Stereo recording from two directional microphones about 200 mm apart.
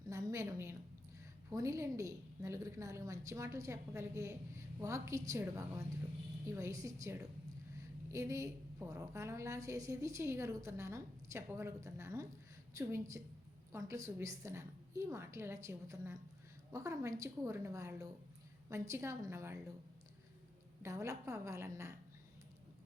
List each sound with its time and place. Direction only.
0.1 s a sound: 15° right (ahead or behind)
1.5 s a woman's voice: 15° right (ahead or behind)
20.8 s a woman's voice: 15° right (ahead or behind)